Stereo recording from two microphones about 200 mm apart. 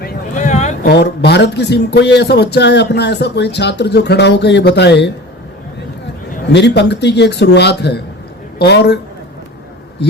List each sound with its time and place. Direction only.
0.0 s a sound: 40° left (ahead or behind)
0.9 s speech: 55° left (ahead or behind)
6.5 s a woman's voice: 60° left (ahead or behind)